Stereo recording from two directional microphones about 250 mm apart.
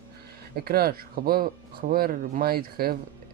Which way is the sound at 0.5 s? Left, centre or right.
Right.